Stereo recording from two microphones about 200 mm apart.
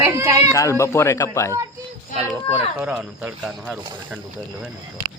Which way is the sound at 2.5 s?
5° right (ahead or behind).